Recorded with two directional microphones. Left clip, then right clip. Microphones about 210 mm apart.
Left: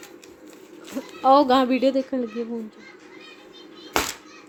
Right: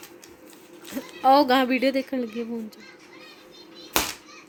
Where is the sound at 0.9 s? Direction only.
5° right (ahead or behind).